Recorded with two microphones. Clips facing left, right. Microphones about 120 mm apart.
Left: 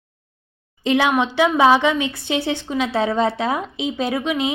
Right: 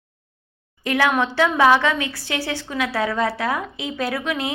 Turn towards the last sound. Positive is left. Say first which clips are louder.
# left 3 dB
turn(degrees=20)  # may be behind; listen again after turning